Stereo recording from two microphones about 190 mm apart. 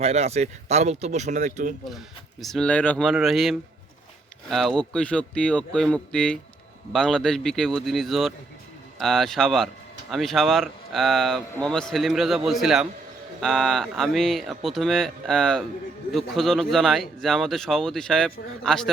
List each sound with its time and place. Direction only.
0.0 s speech: 35° right (ahead or behind)
2.4 s speech: 5° left (ahead or behind)